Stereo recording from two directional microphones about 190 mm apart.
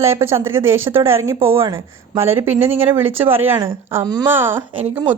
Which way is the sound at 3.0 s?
90° right.